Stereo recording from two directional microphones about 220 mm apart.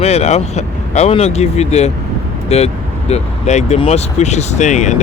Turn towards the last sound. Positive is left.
turn(degrees=35)  # may be behind; listen again after turning